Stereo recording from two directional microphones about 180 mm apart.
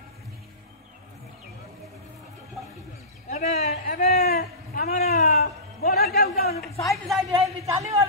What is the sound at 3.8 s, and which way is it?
A man's voice, 60° left (ahead or behind).